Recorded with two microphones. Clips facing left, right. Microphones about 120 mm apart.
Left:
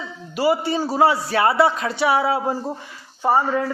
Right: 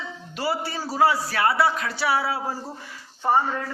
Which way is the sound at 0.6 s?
20° left (ahead or behind).